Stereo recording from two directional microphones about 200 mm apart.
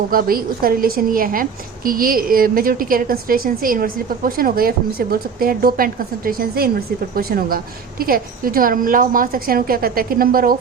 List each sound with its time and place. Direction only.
0.1 s a woman's voice: 45° right (ahead or behind)